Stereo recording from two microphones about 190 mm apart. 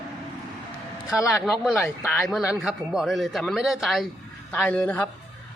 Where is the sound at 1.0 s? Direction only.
15° left (ahead or behind).